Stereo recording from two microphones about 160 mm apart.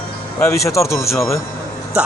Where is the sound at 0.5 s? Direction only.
20° left (ahead or behind).